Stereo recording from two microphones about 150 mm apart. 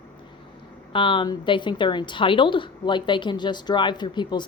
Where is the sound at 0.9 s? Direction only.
35° left (ahead or behind).